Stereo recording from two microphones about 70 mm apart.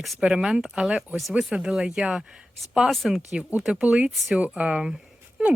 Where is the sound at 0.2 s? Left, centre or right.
Centre.